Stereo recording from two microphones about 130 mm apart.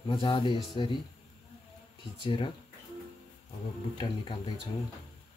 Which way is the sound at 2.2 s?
40° left (ahead or behind).